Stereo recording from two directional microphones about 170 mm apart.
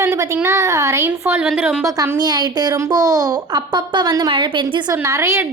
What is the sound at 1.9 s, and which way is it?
A woman's voice, 20° right (ahead or behind).